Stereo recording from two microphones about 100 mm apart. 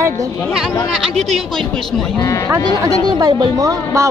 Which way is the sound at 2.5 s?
35° right (ahead or behind).